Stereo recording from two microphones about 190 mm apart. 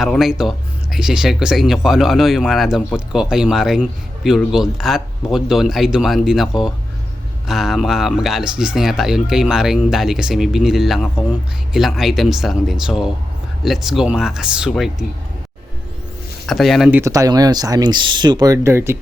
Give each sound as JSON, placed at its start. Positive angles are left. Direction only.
{"t": 0.0, "sound": "speech", "side_deg": 0}
{"t": 16.5, "sound": "speech", "side_deg": 0}
{"t": 17.0, "sound": "speech", "side_deg": -20}